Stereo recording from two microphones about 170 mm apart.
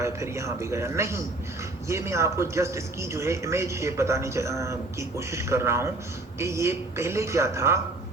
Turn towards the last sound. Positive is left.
turn(degrees=-15)  # may be behind; listen again after turning